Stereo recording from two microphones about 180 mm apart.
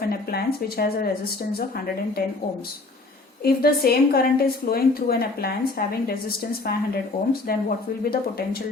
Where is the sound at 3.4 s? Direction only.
60° left (ahead or behind).